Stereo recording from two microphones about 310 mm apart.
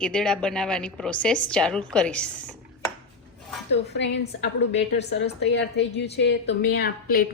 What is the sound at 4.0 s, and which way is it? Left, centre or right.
A woman's voice, left.